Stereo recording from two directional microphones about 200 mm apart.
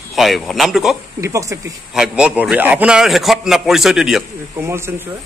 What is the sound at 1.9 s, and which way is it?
A man's voice, 5° right (ahead or behind).